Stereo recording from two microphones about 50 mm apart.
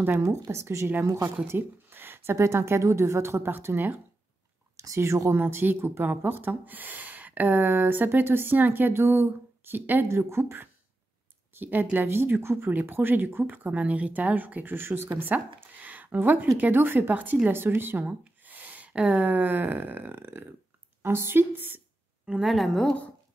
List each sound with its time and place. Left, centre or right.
0.2 s speech: right
2.3 s a woman's voice: right
4.9 s a woman's voice: right
5.3 s speech: right
10.0 s a woman's voice: right
11.5 s speech: right
12.2 s speech: right
12.8 s speech: right
15.3 s a sound: right
16.5 s speech: right
21.0 s speech: right
22.4 s a woman's voice: centre